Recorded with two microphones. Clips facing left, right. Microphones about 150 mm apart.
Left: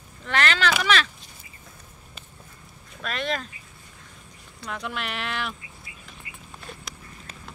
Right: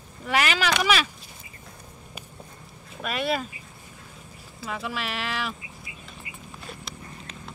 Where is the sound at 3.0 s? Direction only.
10° right (ahead or behind).